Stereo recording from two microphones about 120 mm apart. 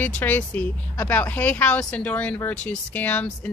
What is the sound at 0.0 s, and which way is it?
Speech, 15° left (ahead or behind).